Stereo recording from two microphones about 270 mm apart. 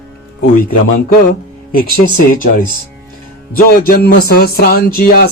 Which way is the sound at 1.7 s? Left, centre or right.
Left.